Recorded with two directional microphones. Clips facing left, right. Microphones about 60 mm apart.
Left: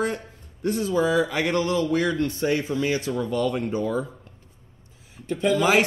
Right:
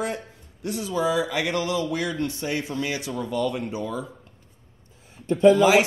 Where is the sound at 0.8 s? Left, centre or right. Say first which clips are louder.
Left 2 dB; left.